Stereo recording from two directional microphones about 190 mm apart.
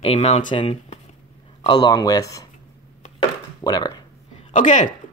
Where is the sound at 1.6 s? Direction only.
20° left (ahead or behind).